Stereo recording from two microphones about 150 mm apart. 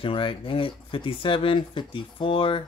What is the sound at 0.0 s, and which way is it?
Speech, 35° left (ahead or behind).